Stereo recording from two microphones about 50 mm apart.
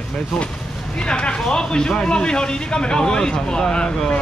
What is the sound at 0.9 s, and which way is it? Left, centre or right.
A man's voice, centre.